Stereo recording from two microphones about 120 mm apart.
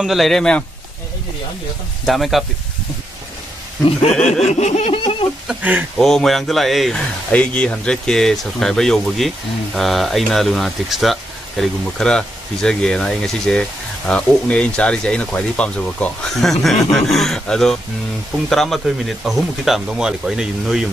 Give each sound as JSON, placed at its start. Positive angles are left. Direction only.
{"t": 0.0, "sound": "speech", "side_deg": 0}
{"t": 2.0, "sound": "speech", "side_deg": 0}
{"t": 4.1, "sound": "speech", "side_deg": 5}
{"t": 4.6, "sound": "a sound", "side_deg": 65}
{"t": 5.5, "sound": "speech", "side_deg": -15}
{"t": 5.9, "sound": "speech", "side_deg": 0}